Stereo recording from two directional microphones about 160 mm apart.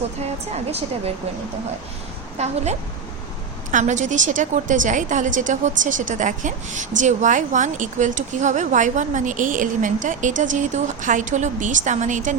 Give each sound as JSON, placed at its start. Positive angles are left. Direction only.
{"t": 0.5, "sound": "a woman's voice", "side_deg": -40}
{"t": 2.4, "sound": "a woman's voice", "side_deg": -45}
{"t": 3.7, "sound": "a woman's voice", "side_deg": -50}